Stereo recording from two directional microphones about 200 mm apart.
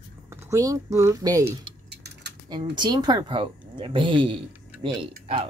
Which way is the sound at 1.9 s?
55° right (ahead or behind).